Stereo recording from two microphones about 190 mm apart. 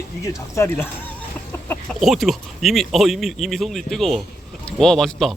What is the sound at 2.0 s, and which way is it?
Speech, centre (ahead or behind).